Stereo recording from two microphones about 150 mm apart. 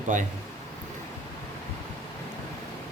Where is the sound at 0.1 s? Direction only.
55° right (ahead or behind).